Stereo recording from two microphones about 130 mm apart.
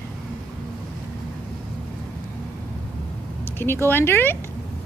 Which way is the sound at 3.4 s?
15° left (ahead or behind).